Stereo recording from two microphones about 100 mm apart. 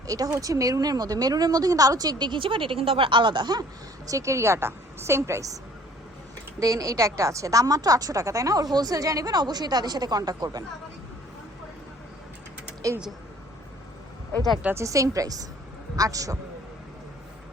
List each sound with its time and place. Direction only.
0.3 s a woman's voice: 35° right (ahead or behind)
4.1 s a woman's voice: 30° right (ahead or behind)
6.6 s a woman's voice: 35° right (ahead or behind)
12.8 s speech: 35° right (ahead or behind)
14.8 s a woman's voice: 35° right (ahead or behind)